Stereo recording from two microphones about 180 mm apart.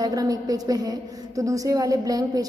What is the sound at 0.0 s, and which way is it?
A woman's voice, 20° right (ahead or behind).